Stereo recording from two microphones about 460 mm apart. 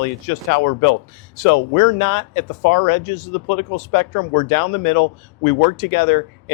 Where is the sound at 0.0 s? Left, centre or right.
Left.